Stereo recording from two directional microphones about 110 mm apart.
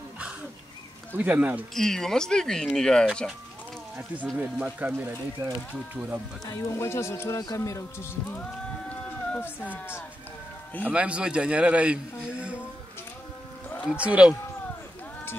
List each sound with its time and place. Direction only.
1.1 s a man's voice: 15° right (ahead or behind)
1.8 s speech: 5° left (ahead or behind)
4.4 s a man's voice: 15° right (ahead or behind)
6.4 s speech: 25° left (ahead or behind)
8.4 s a sound: 10° left (ahead or behind)
9.4 s speech: 20° left (ahead or behind)
10.9 s a man's voice: 10° right (ahead or behind)
13.8 s a man's voice: 10° right (ahead or behind)